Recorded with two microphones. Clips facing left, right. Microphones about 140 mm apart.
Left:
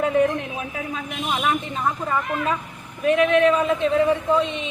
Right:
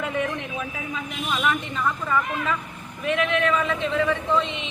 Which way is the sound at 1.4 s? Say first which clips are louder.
Even; 35° left (ahead or behind).